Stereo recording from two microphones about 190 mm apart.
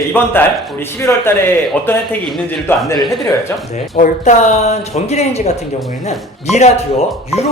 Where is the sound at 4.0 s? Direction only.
40° left (ahead or behind).